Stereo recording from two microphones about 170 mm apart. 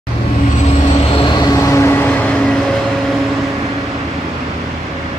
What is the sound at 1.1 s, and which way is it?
Train, 25° left (ahead or behind).